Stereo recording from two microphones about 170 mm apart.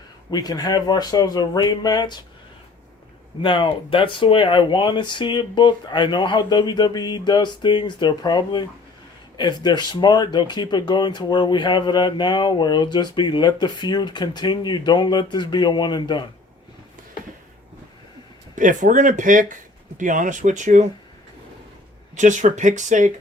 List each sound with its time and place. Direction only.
0.3 s speech: 25° left (ahead or behind)
3.4 s speech: 30° left (ahead or behind)
18.5 s speech: 50° right (ahead or behind)
22.1 s speech: 45° right (ahead or behind)